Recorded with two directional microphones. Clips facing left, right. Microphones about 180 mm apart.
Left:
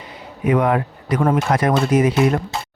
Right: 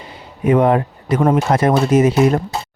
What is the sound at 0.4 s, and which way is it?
Speech, 30° right (ahead or behind).